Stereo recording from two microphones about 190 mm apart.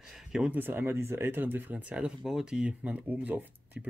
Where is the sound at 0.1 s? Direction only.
5° right (ahead or behind).